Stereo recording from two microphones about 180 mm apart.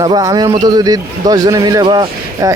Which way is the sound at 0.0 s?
20° right (ahead or behind).